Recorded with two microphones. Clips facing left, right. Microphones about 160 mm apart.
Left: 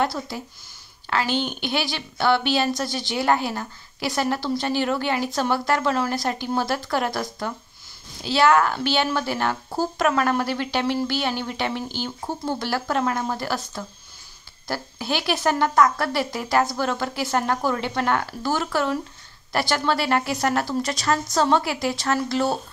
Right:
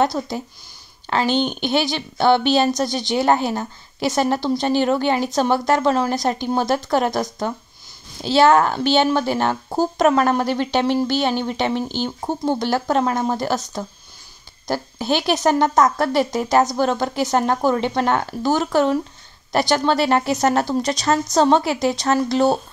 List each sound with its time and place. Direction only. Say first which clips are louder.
0.0 s a woman's voice: right 5 dB; 20° right (ahead or behind)